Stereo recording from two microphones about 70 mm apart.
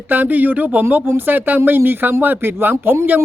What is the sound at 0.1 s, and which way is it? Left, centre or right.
Speech, right.